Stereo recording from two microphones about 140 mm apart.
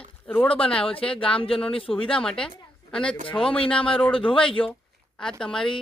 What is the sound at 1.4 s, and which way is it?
Speech, 40° left (ahead or behind).